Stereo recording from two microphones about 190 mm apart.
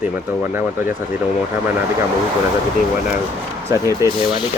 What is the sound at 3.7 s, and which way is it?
Speech, 15° right (ahead or behind).